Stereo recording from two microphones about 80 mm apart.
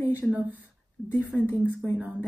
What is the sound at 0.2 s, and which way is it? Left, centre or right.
Speech, centre.